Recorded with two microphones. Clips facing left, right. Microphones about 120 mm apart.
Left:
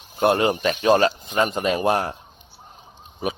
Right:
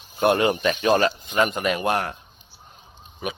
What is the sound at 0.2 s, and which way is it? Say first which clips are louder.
Speech: left 1 dB; 25° left (ahead or behind).